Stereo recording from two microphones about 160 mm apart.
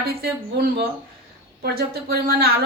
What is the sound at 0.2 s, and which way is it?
Speech, 80° right.